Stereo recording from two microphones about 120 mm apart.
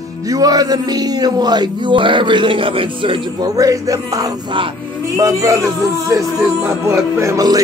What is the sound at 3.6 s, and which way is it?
Music, 30° right (ahead or behind).